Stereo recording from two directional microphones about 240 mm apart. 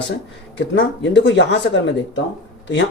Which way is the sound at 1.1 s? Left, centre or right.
Left.